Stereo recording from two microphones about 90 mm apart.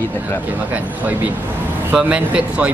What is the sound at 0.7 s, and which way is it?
Speech, 15° right (ahead or behind).